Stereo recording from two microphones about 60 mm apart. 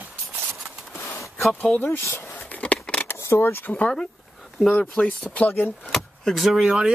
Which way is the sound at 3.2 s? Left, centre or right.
Left.